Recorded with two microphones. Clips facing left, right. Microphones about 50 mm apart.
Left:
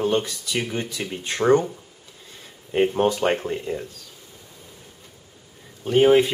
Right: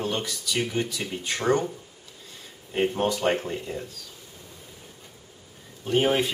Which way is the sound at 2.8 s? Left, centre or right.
Centre.